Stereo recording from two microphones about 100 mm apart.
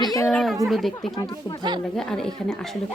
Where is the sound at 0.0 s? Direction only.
40° left (ahead or behind).